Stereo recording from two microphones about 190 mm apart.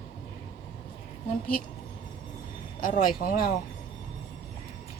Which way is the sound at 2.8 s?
45° left (ahead or behind).